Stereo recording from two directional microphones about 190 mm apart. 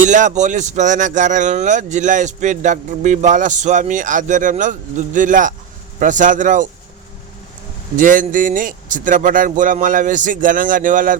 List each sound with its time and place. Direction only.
0.0 s speech: 40° right (ahead or behind)
7.9 s speech: 45° right (ahead or behind)